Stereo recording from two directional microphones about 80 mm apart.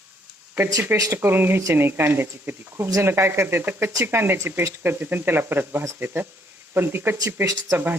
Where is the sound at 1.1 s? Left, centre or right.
Right.